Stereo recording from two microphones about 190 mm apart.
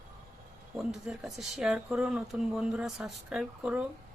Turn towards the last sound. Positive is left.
turn(degrees=-5)  # may be behind; listen again after turning